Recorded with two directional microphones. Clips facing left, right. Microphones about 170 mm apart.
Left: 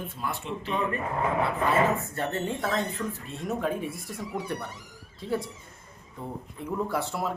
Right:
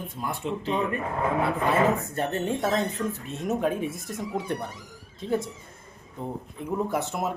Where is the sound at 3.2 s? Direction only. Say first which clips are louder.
Right 4 dB; 20° right (ahead or behind).